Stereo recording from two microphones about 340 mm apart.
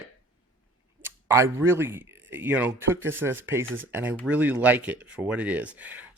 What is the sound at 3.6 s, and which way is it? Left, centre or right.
Speech, right.